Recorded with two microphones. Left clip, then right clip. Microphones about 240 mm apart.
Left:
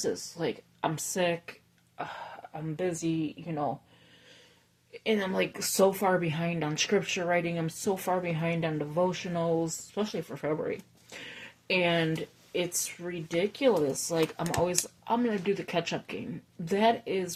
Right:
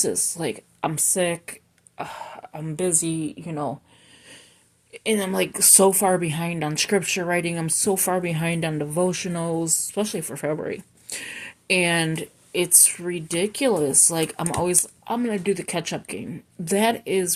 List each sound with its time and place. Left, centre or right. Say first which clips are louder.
0.0 s speech: right 6 dB; right
2.0 s speech: right 5 dB; right
4.9 s speech: right 5 dB; right